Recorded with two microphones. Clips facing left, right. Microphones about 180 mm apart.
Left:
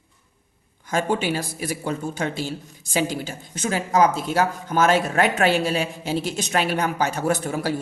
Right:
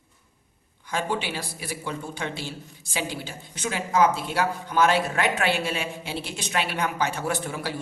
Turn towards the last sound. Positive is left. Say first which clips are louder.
# left 6 dB
turn(degrees=45)  # may be behind; listen again after turning